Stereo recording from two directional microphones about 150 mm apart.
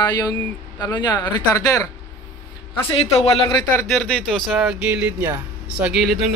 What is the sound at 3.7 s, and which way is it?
Speech, 10° left (ahead or behind).